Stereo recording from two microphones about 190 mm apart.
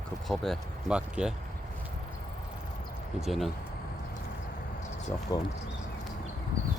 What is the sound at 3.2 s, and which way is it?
Speech, centre (ahead or behind).